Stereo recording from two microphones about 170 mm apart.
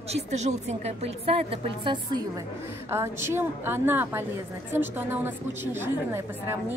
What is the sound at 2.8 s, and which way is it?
A woman's voice, 15° right (ahead or behind).